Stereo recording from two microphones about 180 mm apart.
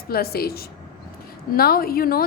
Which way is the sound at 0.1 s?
60° left (ahead or behind).